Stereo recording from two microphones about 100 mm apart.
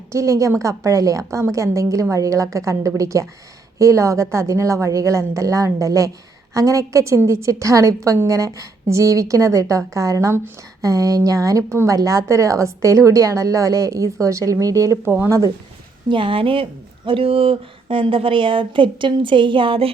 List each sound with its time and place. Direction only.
0.1 s a woman's voice: 30° right (ahead or behind)
16.0 s a woman's voice: 60° right (ahead or behind)